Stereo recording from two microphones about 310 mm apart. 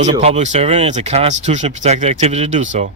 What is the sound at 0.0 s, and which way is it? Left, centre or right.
Speech, centre.